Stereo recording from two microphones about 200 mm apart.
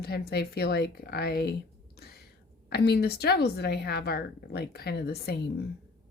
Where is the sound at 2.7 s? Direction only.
55° left (ahead or behind).